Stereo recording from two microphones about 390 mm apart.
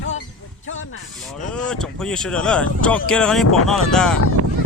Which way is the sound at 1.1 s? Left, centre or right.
Centre.